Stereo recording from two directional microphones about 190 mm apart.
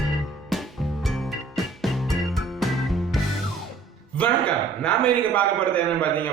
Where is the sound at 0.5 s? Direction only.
Centre (ahead or behind).